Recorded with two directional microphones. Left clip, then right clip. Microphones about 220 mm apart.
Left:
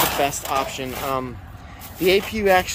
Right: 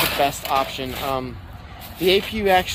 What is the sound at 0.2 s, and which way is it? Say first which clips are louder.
Speech: right 2 dB; 10° left (ahead or behind).